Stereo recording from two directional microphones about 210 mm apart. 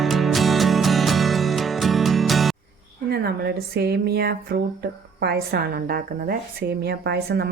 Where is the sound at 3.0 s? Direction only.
50° right (ahead or behind).